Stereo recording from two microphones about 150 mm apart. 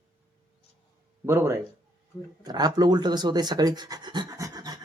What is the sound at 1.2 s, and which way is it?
Speech, 15° right (ahead or behind).